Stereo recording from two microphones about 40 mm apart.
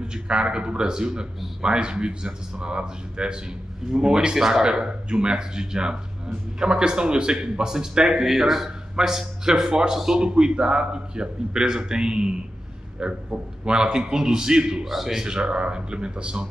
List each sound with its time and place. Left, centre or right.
0.1 s speech: right
8.2 s speech: centre
10.3 s speech: right
14.9 s speech: centre
15.2 s speech: right